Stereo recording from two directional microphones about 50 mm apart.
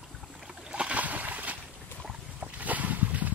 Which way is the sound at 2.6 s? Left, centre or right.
Right.